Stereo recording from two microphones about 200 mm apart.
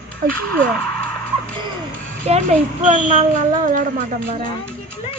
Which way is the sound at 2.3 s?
30° right (ahead or behind).